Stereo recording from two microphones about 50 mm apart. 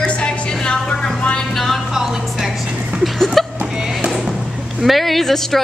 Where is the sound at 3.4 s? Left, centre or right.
Centre.